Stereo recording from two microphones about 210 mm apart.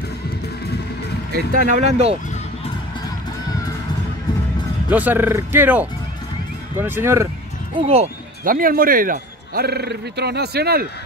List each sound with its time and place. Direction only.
1.3 s speech: 40° right (ahead or behind)
4.9 s speech: 10° right (ahead or behind)
7.7 s speech: 30° right (ahead or behind)
8.5 s speech: 40° right (ahead or behind)